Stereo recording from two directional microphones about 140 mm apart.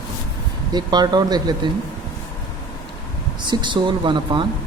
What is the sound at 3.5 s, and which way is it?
Speech, 35° right (ahead or behind).